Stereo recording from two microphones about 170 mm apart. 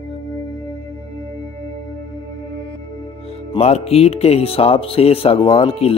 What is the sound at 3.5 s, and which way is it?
Speech, 35° left (ahead or behind).